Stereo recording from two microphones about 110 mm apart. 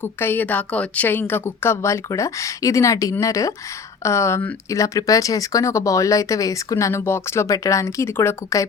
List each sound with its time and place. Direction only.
0.0 s speech: 20° left (ahead or behind)